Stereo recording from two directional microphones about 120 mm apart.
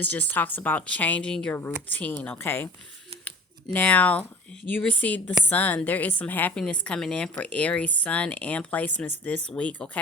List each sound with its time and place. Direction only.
0.0 s a woman's voice: 15° left (ahead or behind)